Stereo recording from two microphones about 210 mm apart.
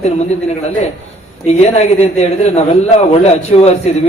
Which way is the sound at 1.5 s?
30° left (ahead or behind).